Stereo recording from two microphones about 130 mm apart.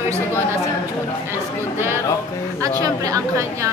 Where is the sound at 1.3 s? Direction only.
20° right (ahead or behind).